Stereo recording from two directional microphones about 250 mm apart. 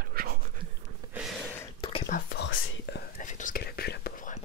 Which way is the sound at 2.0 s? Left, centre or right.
Left.